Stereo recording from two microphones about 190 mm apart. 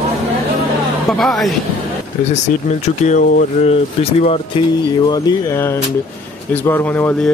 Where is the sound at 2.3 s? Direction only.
35° left (ahead or behind).